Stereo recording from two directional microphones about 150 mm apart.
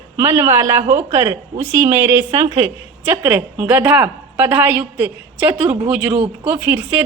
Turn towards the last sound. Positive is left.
turn(degrees=-10)  # may be behind; listen again after turning